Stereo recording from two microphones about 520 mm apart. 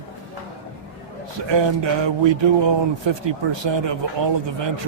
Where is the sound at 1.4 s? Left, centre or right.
Right.